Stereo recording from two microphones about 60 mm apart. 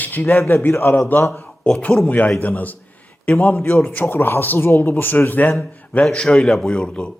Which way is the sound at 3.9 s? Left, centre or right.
Left.